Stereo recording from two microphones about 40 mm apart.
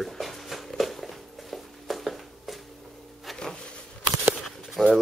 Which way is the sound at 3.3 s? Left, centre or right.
Centre.